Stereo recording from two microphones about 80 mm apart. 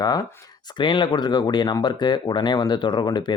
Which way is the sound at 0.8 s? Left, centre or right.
Left.